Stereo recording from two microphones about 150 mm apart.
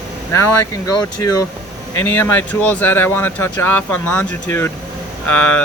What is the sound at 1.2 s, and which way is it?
Speech, 20° left (ahead or behind).